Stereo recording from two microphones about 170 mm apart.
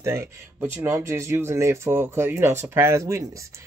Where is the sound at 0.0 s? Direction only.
15° right (ahead or behind).